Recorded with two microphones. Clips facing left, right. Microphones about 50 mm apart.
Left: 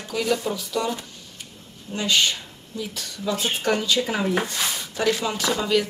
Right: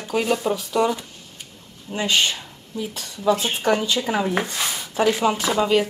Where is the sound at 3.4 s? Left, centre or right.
Right.